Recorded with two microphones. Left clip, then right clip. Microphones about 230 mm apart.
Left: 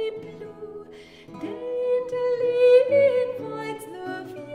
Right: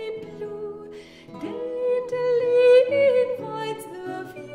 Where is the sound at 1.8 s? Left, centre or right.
Right.